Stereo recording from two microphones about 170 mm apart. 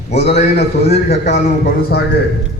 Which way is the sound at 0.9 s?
40° left (ahead or behind).